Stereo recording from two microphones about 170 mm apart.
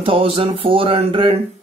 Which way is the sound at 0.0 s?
30° right (ahead or behind).